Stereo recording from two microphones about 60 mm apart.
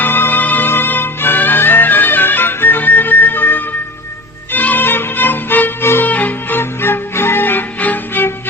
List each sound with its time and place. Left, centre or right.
0.0 s music: left
6.1 s music: left
6.6 s music: left